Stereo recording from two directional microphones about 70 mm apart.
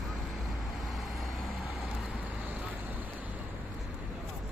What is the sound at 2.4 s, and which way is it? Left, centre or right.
Vehicle, right.